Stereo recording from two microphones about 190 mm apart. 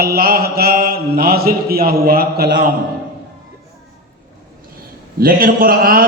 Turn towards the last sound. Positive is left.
turn(degrees=-50)  # may be behind; listen again after turning